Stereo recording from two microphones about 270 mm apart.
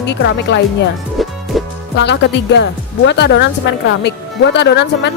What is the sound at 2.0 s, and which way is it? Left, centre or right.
Speech, left.